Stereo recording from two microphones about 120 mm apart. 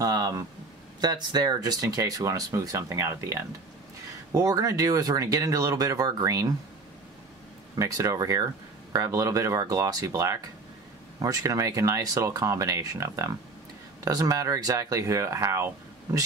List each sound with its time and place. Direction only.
0.0 s a sound: 30° right (ahead or behind)
1.0 s speech: 35° right (ahead or behind)
7.7 s speech: 25° right (ahead or behind)